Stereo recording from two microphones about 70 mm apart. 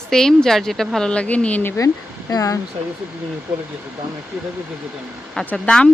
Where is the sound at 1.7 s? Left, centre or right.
Left.